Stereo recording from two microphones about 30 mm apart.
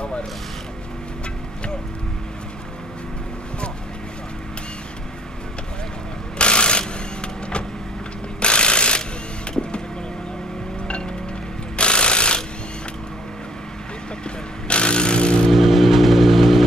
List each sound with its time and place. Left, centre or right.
6.3 s ratchet: left
7.2 s vehicle: left
8.4 s ratchet: left
9.5 s vehicle: left
11.7 s a sound: left
14.7 s vehicle: left
15.5 s vehicle: centre